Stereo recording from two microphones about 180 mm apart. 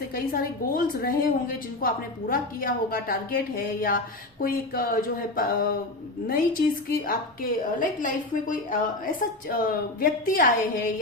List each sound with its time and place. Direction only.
0.1 s a woman's voice: 55° left (ahead or behind)